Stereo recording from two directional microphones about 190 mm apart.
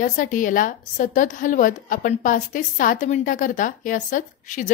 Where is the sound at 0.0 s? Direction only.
45° left (ahead or behind).